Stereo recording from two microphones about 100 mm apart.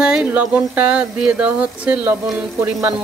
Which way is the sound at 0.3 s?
15° right (ahead or behind).